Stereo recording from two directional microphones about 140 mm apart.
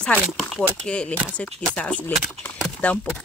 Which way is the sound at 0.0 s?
5° left (ahead or behind).